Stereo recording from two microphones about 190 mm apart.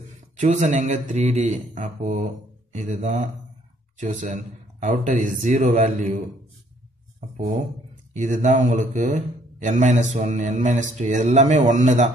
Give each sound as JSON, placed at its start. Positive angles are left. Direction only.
{"t": 0.4, "sound": "speech", "side_deg": -40}